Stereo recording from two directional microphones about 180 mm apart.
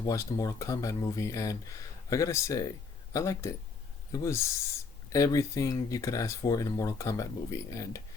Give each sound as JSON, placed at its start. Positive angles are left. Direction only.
{"t": 0.0, "sound": "speech", "side_deg": 20}